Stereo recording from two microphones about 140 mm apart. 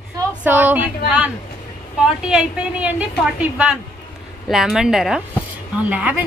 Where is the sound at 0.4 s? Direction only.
10° right (ahead or behind).